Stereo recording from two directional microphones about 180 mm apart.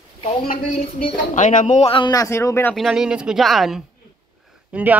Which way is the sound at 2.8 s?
Centre (ahead or behind).